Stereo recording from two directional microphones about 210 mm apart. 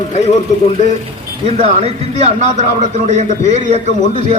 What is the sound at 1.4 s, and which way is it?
A man's voice, 30° right (ahead or behind).